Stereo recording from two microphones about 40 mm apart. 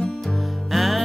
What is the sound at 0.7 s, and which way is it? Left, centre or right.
Music, centre.